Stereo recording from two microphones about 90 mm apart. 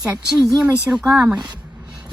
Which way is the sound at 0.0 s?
5° right (ahead or behind).